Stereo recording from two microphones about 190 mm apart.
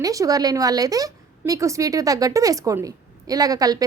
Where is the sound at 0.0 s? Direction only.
20° right (ahead or behind).